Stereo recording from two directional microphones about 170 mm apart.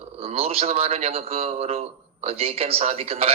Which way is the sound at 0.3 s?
35° right (ahead or behind).